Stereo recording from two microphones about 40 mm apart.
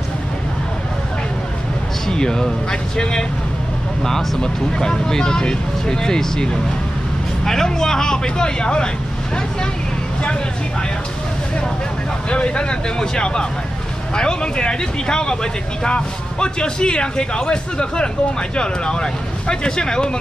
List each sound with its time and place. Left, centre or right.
2.0 s speech: centre
12.3 s speech: left